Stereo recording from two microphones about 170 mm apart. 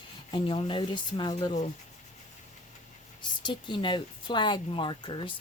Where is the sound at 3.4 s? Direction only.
25° left (ahead or behind).